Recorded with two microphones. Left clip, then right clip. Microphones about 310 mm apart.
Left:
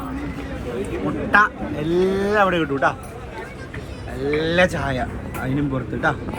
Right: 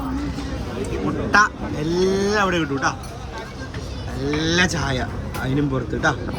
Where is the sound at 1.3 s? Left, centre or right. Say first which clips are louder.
Left 1 dB; centre.